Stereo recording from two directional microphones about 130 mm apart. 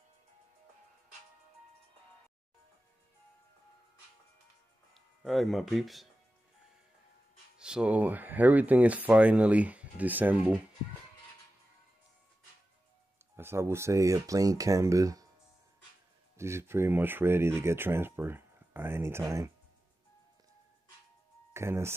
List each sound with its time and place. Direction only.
4.9 s speech: centre (ahead or behind)
7.5 s speech: 5° right (ahead or behind)
13.4 s speech: 20° right (ahead or behind)
16.3 s speech: 20° right (ahead or behind)
21.5 s speech: 20° right (ahead or behind)